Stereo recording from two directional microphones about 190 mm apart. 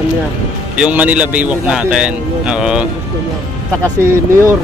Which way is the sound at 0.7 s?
5° right (ahead or behind).